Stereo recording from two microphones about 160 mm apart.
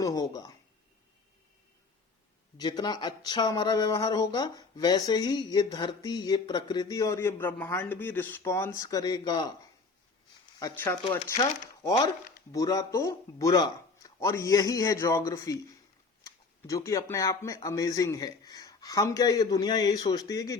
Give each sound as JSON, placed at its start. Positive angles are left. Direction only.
{"t": 0.0, "sound": "a sound", "side_deg": 25}
{"t": 2.6, "sound": "speech", "side_deg": 25}
{"t": 10.6, "sound": "speech", "side_deg": 20}